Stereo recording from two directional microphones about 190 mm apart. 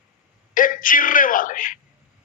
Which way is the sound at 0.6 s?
45° left (ahead or behind).